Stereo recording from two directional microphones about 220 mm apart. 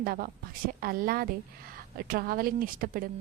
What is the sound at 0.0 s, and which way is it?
A woman's voice, 40° right (ahead or behind).